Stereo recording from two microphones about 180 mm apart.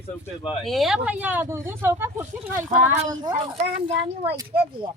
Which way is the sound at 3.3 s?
35° right (ahead or behind).